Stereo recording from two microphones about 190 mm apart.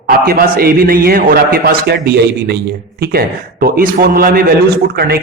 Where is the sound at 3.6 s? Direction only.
50° right (ahead or behind).